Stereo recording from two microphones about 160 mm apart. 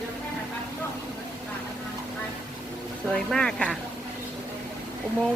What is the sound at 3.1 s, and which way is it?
Speech, 5° left (ahead or behind).